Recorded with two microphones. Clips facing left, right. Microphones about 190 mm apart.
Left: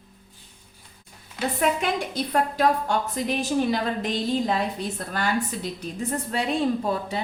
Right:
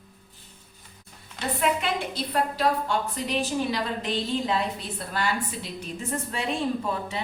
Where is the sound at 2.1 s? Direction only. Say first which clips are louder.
Left 3 dB; 45° left (ahead or behind).